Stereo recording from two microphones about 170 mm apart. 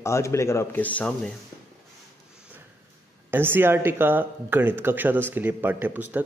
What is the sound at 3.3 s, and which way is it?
Speech, 10° right (ahead or behind).